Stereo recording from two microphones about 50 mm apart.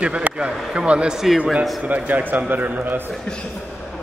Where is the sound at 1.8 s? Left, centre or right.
Right.